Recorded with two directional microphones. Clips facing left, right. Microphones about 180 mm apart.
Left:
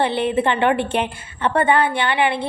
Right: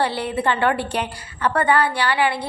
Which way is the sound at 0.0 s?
20° left (ahead or behind).